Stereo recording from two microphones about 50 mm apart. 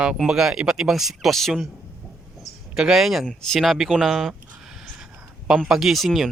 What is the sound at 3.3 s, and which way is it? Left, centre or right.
Speech, centre.